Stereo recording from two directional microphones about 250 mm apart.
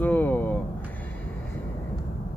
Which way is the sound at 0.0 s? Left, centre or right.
Centre.